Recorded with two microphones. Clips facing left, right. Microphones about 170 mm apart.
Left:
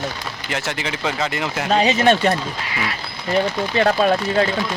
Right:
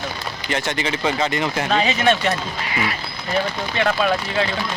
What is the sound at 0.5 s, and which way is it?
Speech, 5° left (ahead or behind).